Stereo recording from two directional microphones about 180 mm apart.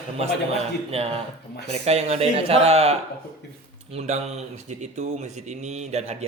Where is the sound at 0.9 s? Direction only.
35° right (ahead or behind).